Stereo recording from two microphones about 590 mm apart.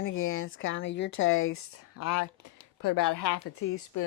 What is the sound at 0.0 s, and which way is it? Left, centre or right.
Speech, left.